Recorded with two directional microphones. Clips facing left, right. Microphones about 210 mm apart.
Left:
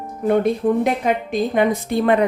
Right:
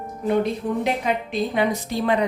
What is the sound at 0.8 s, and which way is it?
A woman's voice, 50° left (ahead or behind).